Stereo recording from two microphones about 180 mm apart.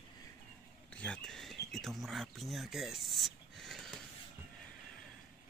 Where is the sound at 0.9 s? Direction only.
5° left (ahead or behind).